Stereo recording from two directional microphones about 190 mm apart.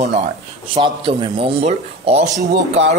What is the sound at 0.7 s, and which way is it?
A man's voice, 30° right (ahead or behind).